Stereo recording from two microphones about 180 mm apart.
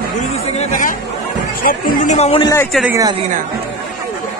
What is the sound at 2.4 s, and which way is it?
Speech, 20° left (ahead or behind).